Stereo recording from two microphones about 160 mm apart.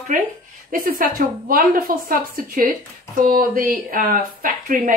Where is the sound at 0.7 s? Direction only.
65° right (ahead or behind).